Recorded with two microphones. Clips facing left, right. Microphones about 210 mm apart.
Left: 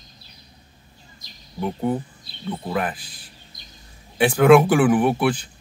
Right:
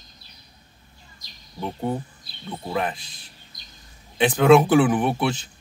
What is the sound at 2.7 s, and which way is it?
Speech, 25° right (ahead or behind).